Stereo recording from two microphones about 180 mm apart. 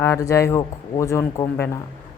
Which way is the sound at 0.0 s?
15° left (ahead or behind).